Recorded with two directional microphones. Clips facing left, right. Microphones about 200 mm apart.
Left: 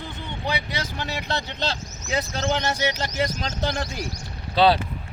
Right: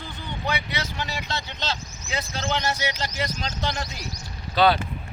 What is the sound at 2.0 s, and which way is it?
Speech, 40° left (ahead or behind).